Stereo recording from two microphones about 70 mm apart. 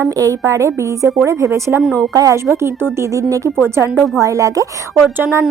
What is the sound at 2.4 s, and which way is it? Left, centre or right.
A woman's voice, right.